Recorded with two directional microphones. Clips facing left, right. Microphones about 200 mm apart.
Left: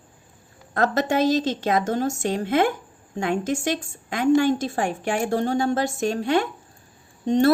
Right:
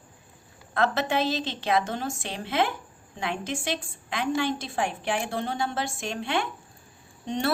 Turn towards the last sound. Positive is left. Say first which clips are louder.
# left 10 dB
turn(degrees=40)  # may be behind; listen again after turning